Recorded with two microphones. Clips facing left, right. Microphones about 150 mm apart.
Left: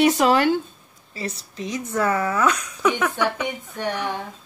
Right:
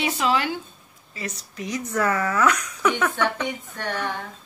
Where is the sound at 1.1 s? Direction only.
30° left (ahead or behind).